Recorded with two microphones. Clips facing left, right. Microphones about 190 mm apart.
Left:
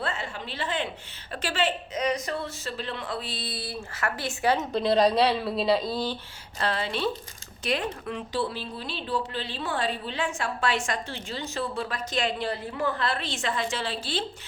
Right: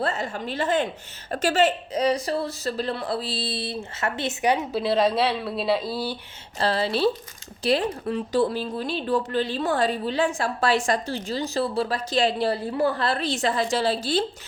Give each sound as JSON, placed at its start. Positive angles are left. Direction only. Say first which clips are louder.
{"t": 0.0, "sound": "a woman's voice", "louder": "right 6 dB", "side_deg": -40}
{"t": 6.6, "sound": "speech", "louder": "right 6 dB", "side_deg": -35}